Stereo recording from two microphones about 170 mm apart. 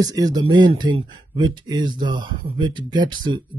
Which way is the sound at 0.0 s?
25° right (ahead or behind).